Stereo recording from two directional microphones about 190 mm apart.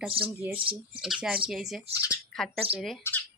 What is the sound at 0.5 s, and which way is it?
Speech, 30° right (ahead or behind).